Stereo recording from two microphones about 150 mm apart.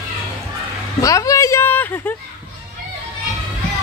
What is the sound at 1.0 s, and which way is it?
Speech, 20° left (ahead or behind).